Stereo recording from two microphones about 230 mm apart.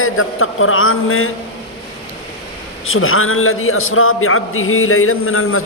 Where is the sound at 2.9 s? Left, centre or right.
Left.